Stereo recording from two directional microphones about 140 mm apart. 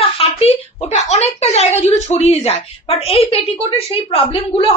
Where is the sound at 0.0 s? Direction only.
45° left (ahead or behind).